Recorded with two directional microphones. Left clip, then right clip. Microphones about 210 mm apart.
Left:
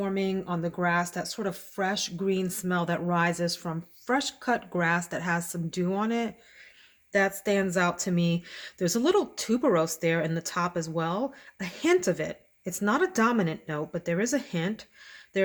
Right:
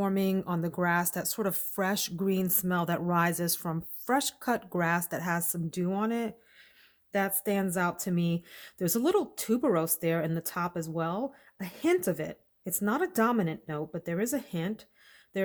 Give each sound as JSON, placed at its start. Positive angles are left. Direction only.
{"t": 0.0, "sound": "speech", "side_deg": -45}